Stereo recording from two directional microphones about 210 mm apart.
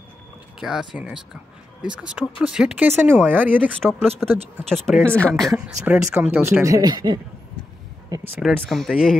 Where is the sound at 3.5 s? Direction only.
5° left (ahead or behind).